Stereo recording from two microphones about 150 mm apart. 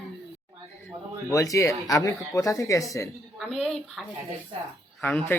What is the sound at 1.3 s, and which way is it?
Speech, 20° left (ahead or behind).